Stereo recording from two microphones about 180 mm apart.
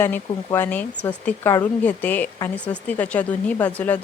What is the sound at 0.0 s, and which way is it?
Speech, 10° left (ahead or behind).